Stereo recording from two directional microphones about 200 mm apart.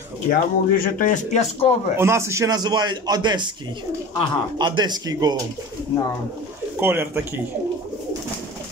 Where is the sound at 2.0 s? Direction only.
15° right (ahead or behind).